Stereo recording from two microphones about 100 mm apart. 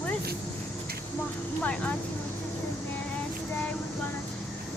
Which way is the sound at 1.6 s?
15° left (ahead or behind).